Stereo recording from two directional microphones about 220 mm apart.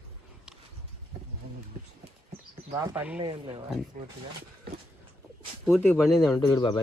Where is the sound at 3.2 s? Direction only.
25° right (ahead or behind).